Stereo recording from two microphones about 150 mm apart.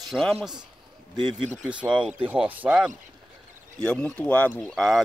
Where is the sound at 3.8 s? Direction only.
10° left (ahead or behind).